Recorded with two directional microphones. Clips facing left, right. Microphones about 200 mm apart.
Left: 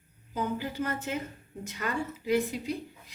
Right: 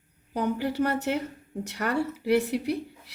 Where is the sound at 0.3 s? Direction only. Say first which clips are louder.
Right 5 dB; 70° right (ahead or behind).